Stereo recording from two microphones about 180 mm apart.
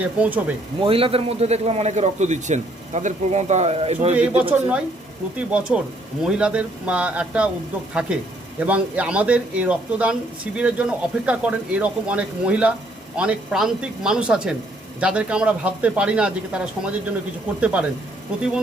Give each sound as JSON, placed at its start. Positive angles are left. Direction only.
{"t": 0.0, "sound": "speech", "side_deg": -10}
{"t": 0.8, "sound": "a man's voice", "side_deg": -30}
{"t": 4.1, "sound": "speech", "side_deg": -10}